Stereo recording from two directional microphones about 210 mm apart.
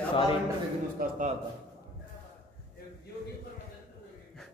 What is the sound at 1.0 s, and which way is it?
Speech, 45° right (ahead or behind).